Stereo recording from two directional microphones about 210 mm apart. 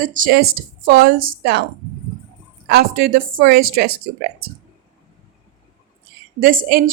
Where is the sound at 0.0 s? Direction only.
40° right (ahead or behind).